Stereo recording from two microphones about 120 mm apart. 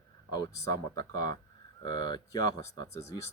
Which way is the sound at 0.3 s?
35° left (ahead or behind).